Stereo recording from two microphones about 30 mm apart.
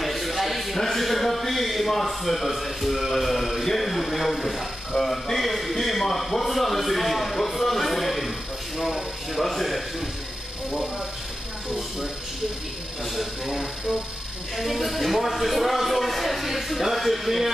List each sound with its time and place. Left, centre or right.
0.0 s a sound: centre
3.0 s speech: centre
3.3 s a man's voice: centre
5.0 s a man's voice: centre
8.7 s speech: centre
9.4 s a man's voice: centre
13.1 s speech: centre
13.6 s speech: right
14.6 s a man's voice: centre